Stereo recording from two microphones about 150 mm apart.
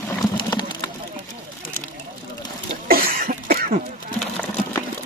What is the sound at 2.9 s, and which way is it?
Cough, 75° right (ahead or behind).